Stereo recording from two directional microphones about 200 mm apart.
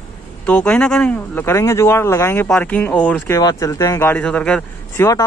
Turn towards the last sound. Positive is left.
turn(degrees=5)  # may be behind; listen again after turning